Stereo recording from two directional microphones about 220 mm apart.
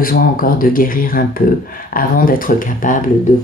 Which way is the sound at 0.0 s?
40° left (ahead or behind).